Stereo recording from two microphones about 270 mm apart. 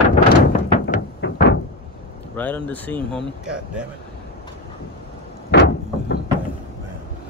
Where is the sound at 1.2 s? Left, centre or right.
Left.